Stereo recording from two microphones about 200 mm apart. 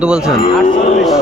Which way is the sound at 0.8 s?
35° left (ahead or behind).